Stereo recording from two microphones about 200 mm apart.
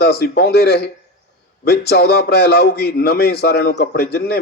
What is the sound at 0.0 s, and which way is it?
A man's voice, 55° left (ahead or behind).